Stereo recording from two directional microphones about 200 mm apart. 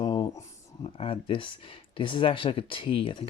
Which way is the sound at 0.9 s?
30° left (ahead or behind).